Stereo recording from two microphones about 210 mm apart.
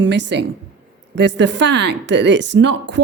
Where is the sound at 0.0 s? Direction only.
55° right (ahead or behind).